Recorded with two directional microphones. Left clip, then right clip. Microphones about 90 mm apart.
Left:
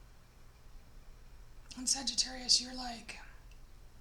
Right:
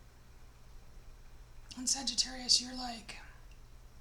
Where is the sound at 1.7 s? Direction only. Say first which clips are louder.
Even; 25° left (ahead or behind).